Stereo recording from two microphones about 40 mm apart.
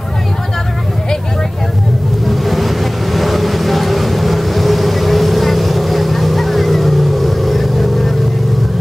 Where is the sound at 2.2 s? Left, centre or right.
Centre.